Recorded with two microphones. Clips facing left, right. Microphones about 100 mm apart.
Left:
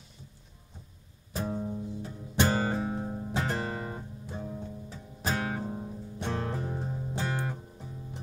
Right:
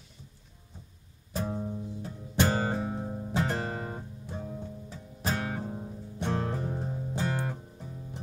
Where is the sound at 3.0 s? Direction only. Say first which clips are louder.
Right 1 dB; 10° left (ahead or behind).